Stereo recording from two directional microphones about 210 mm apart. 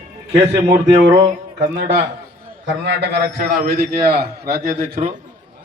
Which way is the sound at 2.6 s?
55° right (ahead or behind).